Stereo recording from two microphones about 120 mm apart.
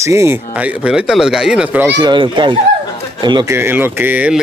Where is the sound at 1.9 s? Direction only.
40° right (ahead or behind).